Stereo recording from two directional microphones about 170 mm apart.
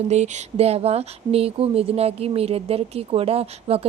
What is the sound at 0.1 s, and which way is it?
Speech, 40° right (ahead or behind).